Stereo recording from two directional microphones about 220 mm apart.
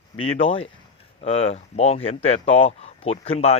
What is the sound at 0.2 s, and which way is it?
Speech, 25° left (ahead or behind).